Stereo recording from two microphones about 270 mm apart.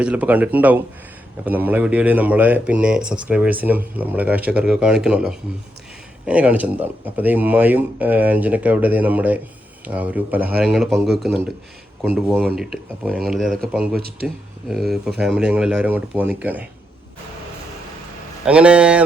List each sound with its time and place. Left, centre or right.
0.0 s speech: centre
13.9 s speech: right
14.7 s speech: centre
18.4 s speech: centre